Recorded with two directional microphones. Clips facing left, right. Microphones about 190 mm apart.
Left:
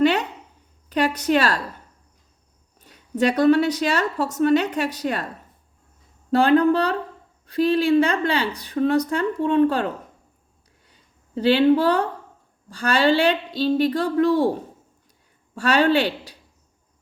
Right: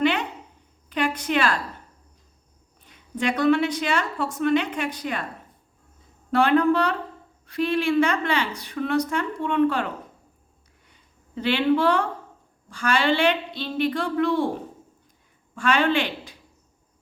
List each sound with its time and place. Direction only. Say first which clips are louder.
0.0 s a sound: left 4 dB; 40° left (ahead or behind)
0.9 s a woman's voice: left 5 dB; 40° left (ahead or behind)
2.8 s a woman's voice: left 5 dB; 40° left (ahead or behind)
6.3 s a woman's voice: left 3 dB; 35° left (ahead or behind)
11.3 s a woman's voice: left 5 dB; 35° left (ahead or behind)
15.5 s speech: left 3 dB; 40° left (ahead or behind)